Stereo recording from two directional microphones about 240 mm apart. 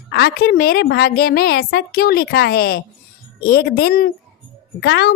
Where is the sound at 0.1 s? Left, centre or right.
Left.